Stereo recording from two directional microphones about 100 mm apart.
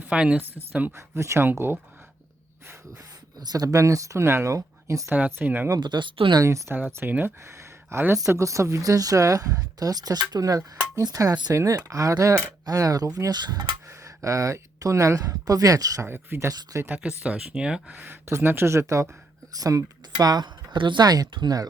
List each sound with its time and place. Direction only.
0.0 s speech: 10° right (ahead or behind)
0.9 s speech: 30° right (ahead or behind)
3.4 s speech: 40° right (ahead or behind)
5.1 s speech: 15° right (ahead or behind)
5.7 s speech: 50° right (ahead or behind)
6.4 s speech: 30° right (ahead or behind)
6.7 s speech: 15° right (ahead or behind); by 13.7 s 45° right (ahead or behind)
14.0 s speech: 35° right (ahead or behind)
16.0 s speech: 20° right (ahead or behind)
16.5 s speech: 35° right (ahead or behind)
16.9 s speech: 10° right (ahead or behind); by 21.7 s 40° right (ahead or behind)